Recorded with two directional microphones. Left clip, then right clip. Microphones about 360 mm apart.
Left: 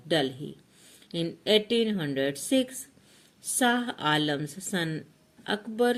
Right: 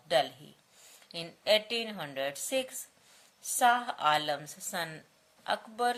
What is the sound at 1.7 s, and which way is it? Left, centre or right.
Speech, right.